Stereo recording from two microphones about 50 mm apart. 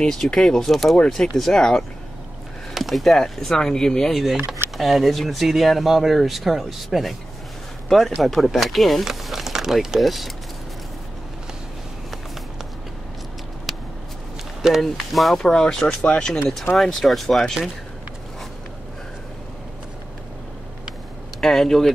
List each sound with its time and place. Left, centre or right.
0.0 s speech: centre
4.1 s speech: centre
14.8 s speech: centre
15.3 s speech: centre
16.7 s speech: centre
21.4 s speech: centre